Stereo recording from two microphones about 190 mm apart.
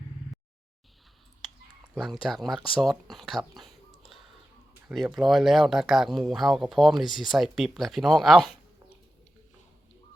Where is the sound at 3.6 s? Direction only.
Centre (ahead or behind).